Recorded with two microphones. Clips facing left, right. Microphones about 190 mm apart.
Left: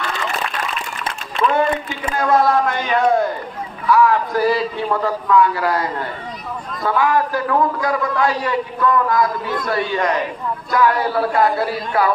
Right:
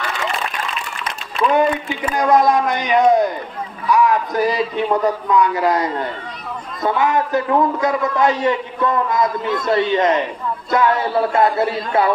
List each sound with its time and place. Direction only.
2.1 s a man's voice: 15° right (ahead or behind)